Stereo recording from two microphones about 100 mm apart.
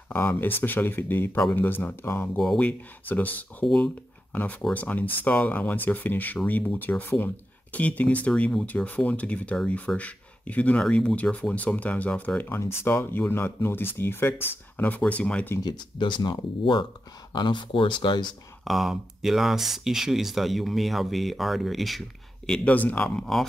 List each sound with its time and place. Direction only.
0.1 s speech: 20° left (ahead or behind)
2.3 s speech: 5° left (ahead or behind)
3.1 s speech: 15° left (ahead or behind)
15.6 s speech: 50° left (ahead or behind)
18.6 s speech: centre (ahead or behind)
22.5 s speech: 15° left (ahead or behind)
23.0 s speech: centre (ahead or behind)